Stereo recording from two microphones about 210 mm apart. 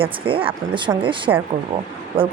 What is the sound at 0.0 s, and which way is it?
A woman's voice, 25° right (ahead or behind).